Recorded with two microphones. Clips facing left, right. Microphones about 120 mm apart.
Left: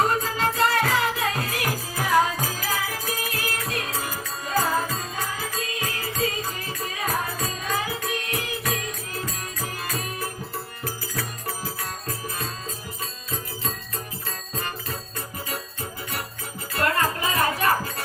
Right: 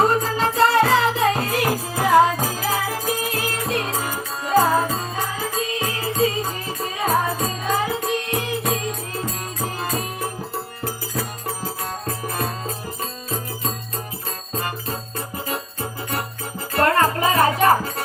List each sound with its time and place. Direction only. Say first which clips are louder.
0.0 s music: right 4 dB; 25° right (ahead or behind)
12.0 s music: right 8 dB; 60° right (ahead or behind)
15.4 s music: right 5 dB; 50° right (ahead or behind)